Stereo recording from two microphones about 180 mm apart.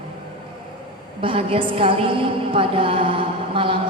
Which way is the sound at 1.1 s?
30° right (ahead or behind).